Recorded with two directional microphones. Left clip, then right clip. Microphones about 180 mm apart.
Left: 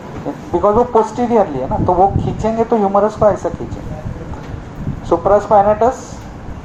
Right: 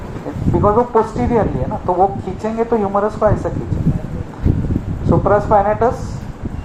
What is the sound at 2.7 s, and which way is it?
Speech, 35° left (ahead or behind).